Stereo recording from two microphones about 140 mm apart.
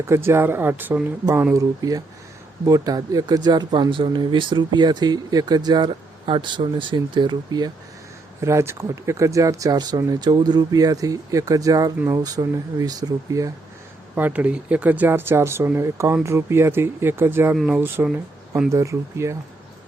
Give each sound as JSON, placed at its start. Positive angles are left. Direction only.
{"t": 0.1, "sound": "speech", "side_deg": -15}
{"t": 14.2, "sound": "speech", "side_deg": -10}
{"t": 18.7, "sound": "speech", "side_deg": -20}